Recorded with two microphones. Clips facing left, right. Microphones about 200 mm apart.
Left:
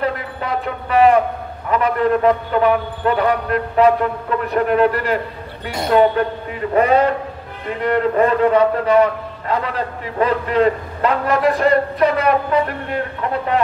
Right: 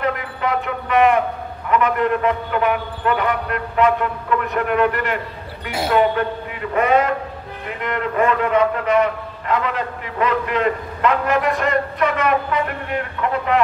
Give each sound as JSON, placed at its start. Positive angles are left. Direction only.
{"t": 0.0, "sound": "music", "side_deg": 35}
{"t": 1.7, "sound": "a man's voice", "side_deg": 35}
{"t": 5.7, "sound": "a man's voice", "side_deg": 0}
{"t": 6.7, "sound": "a man's voice", "side_deg": 35}